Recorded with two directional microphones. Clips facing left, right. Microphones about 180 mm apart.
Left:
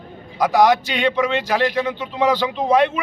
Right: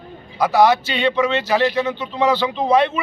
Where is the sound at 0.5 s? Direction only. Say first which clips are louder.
Even; 15° left (ahead or behind).